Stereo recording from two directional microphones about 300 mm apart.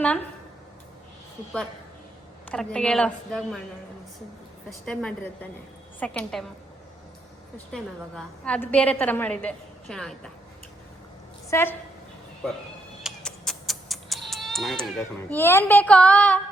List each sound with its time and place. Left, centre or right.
2.5 s a woman's voice: centre
4.9 s a woman's voice: centre
7.7 s a woman's voice: centre
11.5 s a woman's voice: centre
13.0 s cat: centre